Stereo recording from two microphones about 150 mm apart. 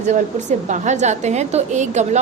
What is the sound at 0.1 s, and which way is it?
A woman's voice, 50° right (ahead or behind).